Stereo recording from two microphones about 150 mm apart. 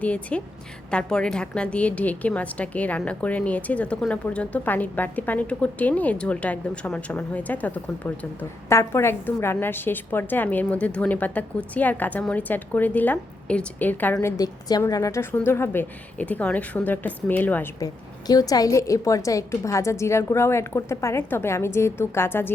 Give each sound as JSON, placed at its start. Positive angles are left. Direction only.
{"t": 0.0, "sound": "a woman's voice", "side_deg": 10}
{"t": 17.7, "sound": "a woman's voice", "side_deg": 25}